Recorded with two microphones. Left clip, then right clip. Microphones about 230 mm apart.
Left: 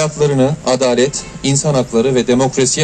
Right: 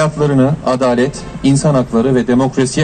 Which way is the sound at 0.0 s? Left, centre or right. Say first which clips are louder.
Even; left.